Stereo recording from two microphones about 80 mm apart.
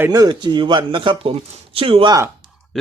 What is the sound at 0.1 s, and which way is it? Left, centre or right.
Speech, right.